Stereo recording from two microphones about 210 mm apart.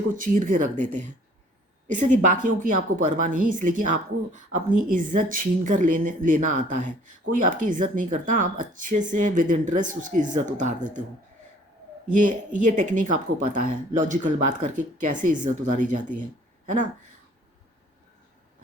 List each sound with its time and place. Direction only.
0.1 s a woman's voice: 40° right (ahead or behind)
12.2 s a woman's voice: 35° right (ahead or behind)